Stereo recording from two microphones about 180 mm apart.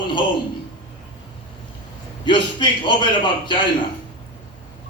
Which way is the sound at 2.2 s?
25° left (ahead or behind).